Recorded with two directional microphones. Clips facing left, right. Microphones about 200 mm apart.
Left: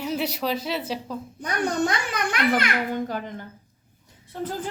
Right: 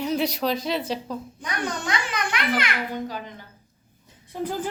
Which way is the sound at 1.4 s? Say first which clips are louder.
Left 6 dB; 45° left (ahead or behind).